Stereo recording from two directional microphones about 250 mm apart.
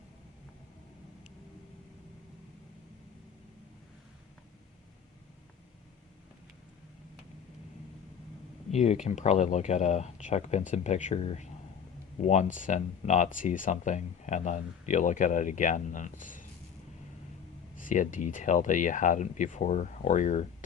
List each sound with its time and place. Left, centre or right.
8.7 s speech: left
17.7 s speech: left